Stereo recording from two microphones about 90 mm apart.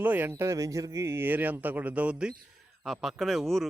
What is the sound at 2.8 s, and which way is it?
Speech, centre (ahead or behind).